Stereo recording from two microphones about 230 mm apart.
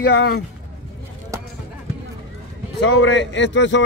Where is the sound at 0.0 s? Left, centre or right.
Left.